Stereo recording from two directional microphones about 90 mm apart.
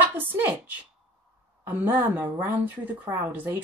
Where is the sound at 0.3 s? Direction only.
20° right (ahead or behind).